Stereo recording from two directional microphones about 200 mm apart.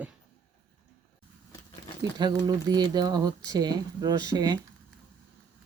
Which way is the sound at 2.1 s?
20° right (ahead or behind).